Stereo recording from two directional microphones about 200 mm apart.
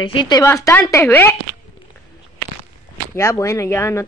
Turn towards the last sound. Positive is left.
turn(degrees=15)  # may be behind; listen again after turning